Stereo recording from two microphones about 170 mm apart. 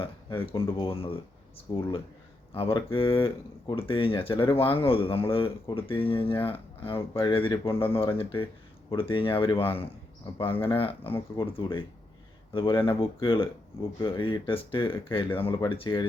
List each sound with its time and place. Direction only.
0.0 s speech: 30° left (ahead or behind)